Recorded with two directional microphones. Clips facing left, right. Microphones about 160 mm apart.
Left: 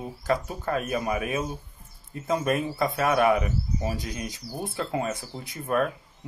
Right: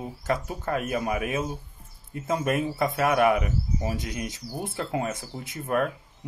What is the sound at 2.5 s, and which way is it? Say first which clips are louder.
Speech: right 1 dB; 20° right (ahead or behind).